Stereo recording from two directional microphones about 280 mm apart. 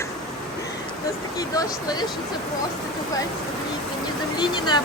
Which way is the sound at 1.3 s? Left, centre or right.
Centre.